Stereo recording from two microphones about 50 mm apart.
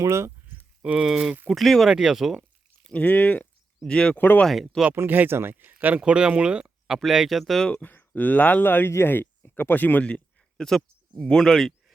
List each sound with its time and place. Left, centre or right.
0.0 s speech: right
0.8 s speech: right
1.0 s speech: centre
1.5 s speech: centre
1.9 s speech: centre
2.9 s speech: left
3.8 s speech: centre
4.4 s speech: centre
5.0 s speech: right
6.0 s speech: centre
7.0 s speech: centre
7.8 s speech: left
8.6 s speech: left
10.6 s speech: centre